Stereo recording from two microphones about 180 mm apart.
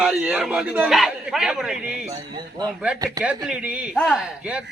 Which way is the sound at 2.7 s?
5° right (ahead or behind).